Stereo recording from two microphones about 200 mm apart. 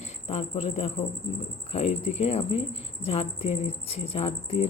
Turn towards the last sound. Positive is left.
turn(degrees=30)  # may be behind; listen again after turning